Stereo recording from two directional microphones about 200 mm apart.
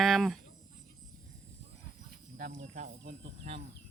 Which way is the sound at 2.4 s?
35° right (ahead or behind).